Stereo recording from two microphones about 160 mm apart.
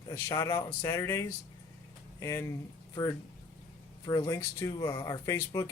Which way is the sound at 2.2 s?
15° left (ahead or behind).